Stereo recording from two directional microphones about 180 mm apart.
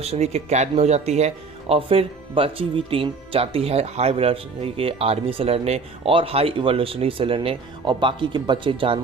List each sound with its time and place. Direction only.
0.0 s speech: 35° right (ahead or behind)